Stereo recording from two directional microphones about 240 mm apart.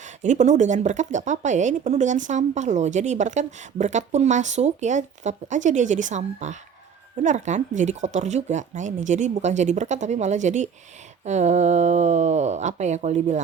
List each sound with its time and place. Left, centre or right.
0.2 s speech: right